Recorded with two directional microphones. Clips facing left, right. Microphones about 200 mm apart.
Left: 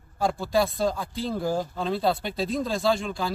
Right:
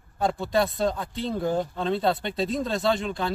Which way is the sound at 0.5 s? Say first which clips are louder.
Left 1 dB; centre (ahead or behind).